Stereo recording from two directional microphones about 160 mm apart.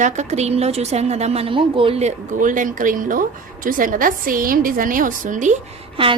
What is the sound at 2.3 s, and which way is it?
A woman's voice, 55° right (ahead or behind).